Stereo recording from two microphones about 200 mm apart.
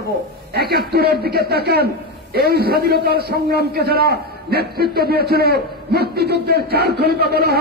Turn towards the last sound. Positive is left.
turn(degrees=-50)  # may be behind; listen again after turning